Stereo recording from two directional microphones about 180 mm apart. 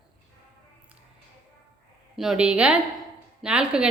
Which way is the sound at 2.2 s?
5° right (ahead or behind).